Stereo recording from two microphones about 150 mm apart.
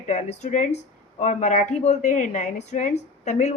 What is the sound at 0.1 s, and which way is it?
A woman's voice, 50° left (ahead or behind).